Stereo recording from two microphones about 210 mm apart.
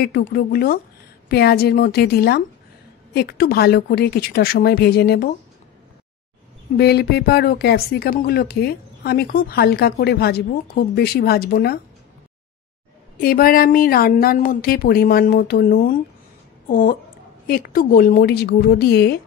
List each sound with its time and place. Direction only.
0.0 s speech: 50° left (ahead or behind)
6.8 s speech: 50° left (ahead or behind)
13.2 s speech: 45° left (ahead or behind)